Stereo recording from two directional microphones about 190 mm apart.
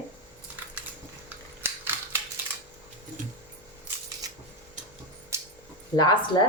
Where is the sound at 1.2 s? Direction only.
10° right (ahead or behind).